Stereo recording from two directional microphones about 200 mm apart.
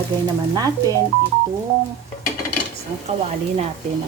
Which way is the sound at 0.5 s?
20° right (ahead or behind).